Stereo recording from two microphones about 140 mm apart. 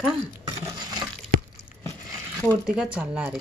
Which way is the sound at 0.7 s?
30° right (ahead or behind).